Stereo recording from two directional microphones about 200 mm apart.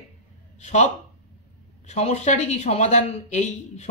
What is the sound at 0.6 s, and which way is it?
Speech, 35° left (ahead or behind).